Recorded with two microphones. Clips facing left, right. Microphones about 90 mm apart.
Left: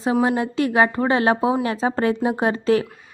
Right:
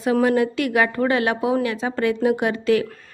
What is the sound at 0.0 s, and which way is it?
A woman's voice, 25° left (ahead or behind).